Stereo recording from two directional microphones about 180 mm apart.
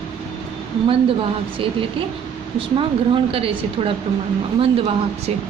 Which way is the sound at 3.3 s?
30° right (ahead or behind).